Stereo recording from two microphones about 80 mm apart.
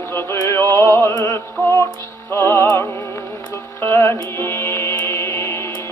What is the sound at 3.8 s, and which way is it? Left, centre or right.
Music, left.